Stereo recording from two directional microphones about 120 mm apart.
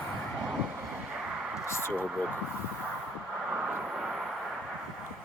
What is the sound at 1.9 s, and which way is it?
Speech, 10° right (ahead or behind).